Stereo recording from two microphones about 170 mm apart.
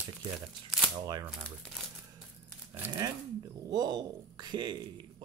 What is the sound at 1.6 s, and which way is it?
Speech, centre (ahead or behind).